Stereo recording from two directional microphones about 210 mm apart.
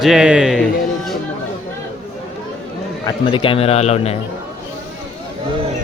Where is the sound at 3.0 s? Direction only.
25° left (ahead or behind).